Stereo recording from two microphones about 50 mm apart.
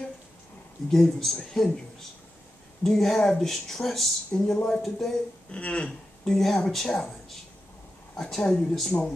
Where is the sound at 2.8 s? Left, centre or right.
Centre.